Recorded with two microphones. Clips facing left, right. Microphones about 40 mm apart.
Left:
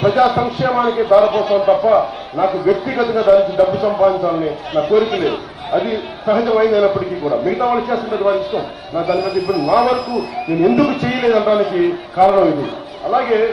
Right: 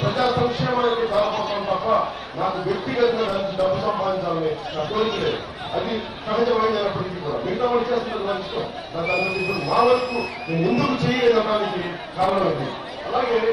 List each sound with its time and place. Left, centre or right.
0.0 s a man's voice: left
9.0 s a man's voice: right
9.6 s speech: left
10.6 s a man's voice: left